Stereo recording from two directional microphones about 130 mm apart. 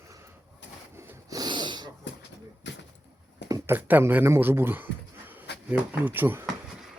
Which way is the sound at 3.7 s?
15° right (ahead or behind).